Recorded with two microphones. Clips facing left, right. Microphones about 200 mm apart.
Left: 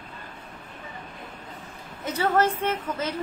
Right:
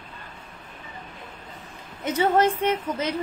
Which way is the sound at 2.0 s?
15° right (ahead or behind).